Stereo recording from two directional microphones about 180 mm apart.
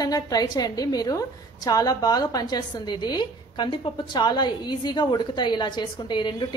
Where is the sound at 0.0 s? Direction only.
20° left (ahead or behind).